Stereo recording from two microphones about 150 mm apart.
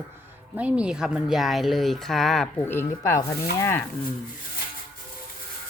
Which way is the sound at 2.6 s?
15° left (ahead or behind).